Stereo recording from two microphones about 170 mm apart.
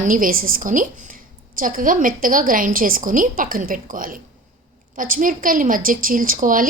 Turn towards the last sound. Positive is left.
turn(degrees=-50)  # may be behind; listen again after turning